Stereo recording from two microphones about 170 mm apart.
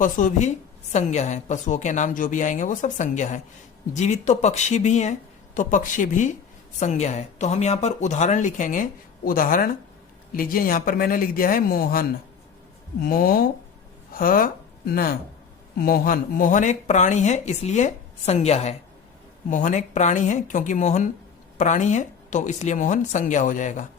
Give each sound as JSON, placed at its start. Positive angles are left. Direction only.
{"t": 0.0, "sound": "a woman's voice", "side_deg": 50}